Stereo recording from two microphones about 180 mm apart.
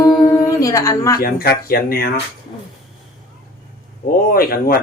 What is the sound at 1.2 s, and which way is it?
Speech, 55° left (ahead or behind).